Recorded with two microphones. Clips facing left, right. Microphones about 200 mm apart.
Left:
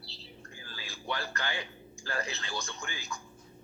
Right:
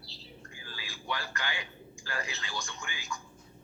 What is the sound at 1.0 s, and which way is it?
Speech, 30° left (ahead or behind).